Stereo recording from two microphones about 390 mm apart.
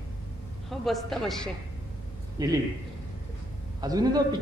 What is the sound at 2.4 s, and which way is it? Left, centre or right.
Speech, centre.